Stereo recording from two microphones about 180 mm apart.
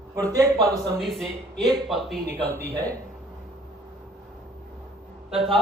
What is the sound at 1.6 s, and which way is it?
Speech, 25° right (ahead or behind).